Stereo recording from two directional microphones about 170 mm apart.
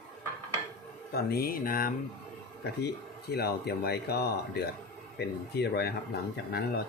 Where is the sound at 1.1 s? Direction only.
65° left (ahead or behind).